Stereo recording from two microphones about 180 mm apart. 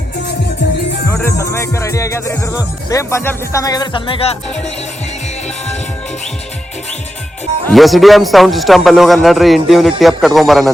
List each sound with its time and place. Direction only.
1.4 s speech: 15° left (ahead or behind)
7.7 s a man's voice: centre (ahead or behind)